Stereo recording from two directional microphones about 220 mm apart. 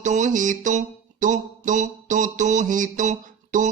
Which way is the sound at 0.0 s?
35° right (ahead or behind).